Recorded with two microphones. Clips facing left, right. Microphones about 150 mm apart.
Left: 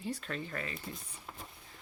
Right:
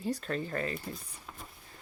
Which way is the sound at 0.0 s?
40° right (ahead or behind).